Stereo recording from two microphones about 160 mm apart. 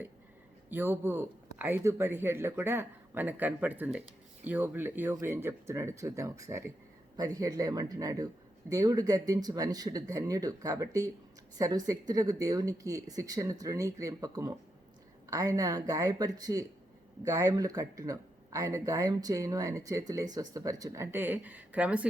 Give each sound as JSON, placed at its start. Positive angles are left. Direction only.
{"t": 0.7, "sound": "speech", "side_deg": -15}